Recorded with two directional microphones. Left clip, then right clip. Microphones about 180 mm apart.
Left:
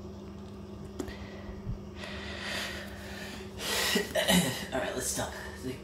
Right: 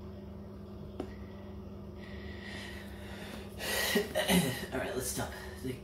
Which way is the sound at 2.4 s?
40° left (ahead or behind).